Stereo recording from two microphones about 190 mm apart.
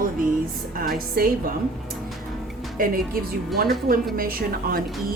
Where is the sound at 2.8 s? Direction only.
50° right (ahead or behind).